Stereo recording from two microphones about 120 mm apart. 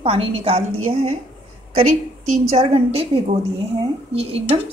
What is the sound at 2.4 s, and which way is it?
A woman's voice, 55° right (ahead or behind).